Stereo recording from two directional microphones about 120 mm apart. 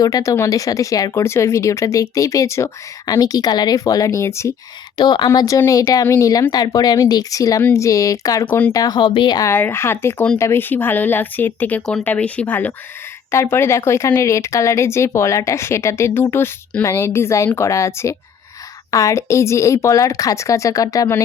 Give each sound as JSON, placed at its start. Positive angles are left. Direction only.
{"t": 0.0, "sound": "speech", "side_deg": 30}
{"t": 4.9, "sound": "speech", "side_deg": 35}
{"t": 8.4, "sound": "speech", "side_deg": 15}
{"t": 8.7, "sound": "speech", "side_deg": 35}
{"t": 9.5, "sound": "speech", "side_deg": 20}